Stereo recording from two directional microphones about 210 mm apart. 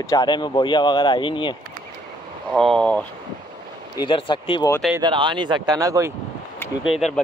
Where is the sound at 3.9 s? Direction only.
20° left (ahead or behind).